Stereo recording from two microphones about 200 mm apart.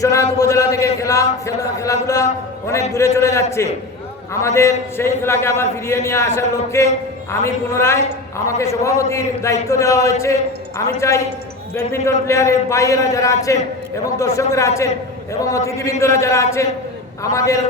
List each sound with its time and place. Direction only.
0.0 s a man's voice: 15° left (ahead or behind)